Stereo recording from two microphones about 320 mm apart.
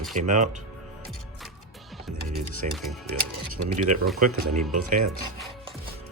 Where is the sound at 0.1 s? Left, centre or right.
Right.